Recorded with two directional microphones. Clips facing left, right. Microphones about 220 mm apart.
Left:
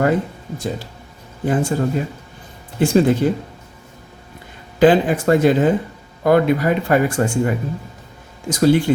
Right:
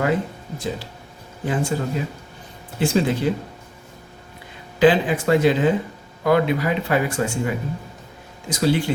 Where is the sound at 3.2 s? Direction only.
45° left (ahead or behind).